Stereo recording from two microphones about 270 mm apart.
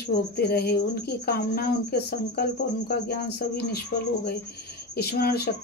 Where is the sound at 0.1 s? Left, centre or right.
Left.